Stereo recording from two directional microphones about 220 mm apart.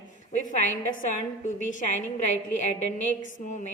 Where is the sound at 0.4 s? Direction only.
35° left (ahead or behind).